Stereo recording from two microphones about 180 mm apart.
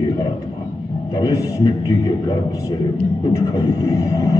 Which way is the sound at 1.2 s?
20° left (ahead or behind).